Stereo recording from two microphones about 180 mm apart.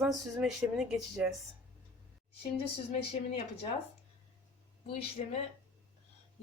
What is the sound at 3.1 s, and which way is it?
Speech, 35° left (ahead or behind).